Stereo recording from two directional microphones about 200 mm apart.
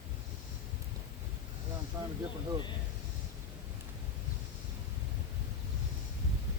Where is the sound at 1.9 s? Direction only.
15° right (ahead or behind).